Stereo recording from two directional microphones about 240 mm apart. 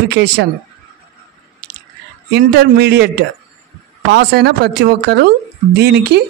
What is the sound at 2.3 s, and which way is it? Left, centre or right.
Speech, right.